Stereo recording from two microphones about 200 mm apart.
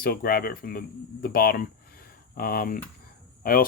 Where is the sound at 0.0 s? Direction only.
50° left (ahead or behind).